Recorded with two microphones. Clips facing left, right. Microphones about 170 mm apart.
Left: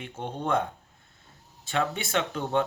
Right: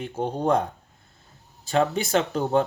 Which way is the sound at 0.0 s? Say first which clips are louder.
Right 7 dB; 35° right (ahead or behind).